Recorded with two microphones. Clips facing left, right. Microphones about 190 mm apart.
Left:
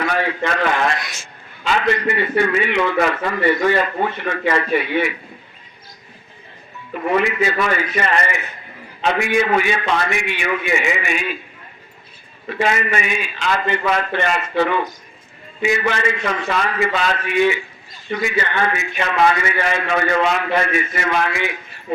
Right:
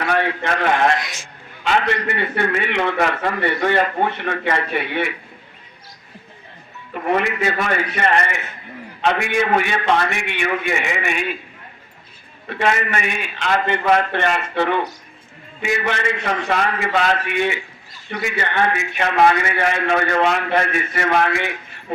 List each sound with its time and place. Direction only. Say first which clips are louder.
0.0 s a man's voice: even; 60° right (ahead or behind)
7.0 s a man's voice: left 1 dB; 55° right (ahead or behind)
12.5 s a man's voice: left 1 dB; 55° right (ahead or behind)